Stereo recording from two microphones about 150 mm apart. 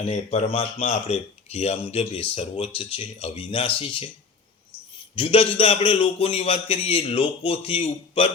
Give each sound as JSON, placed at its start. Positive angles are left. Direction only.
{"t": 0.0, "sound": "speech", "side_deg": 45}
{"t": 5.1, "sound": "speech", "side_deg": 35}